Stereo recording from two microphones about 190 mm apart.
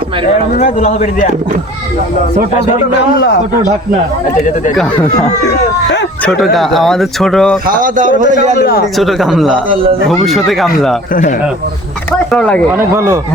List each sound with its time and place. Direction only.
0.6 s a man's voice: 40° left (ahead or behind)
6.2 s speech: centre (ahead or behind)
7.7 s a man's voice: 45° right (ahead or behind)
9.0 s speech: centre (ahead or behind)
11.1 s speech: 45° left (ahead or behind)
12.3 s speech: 5° left (ahead or behind)
12.7 s a man's voice: 15° right (ahead or behind)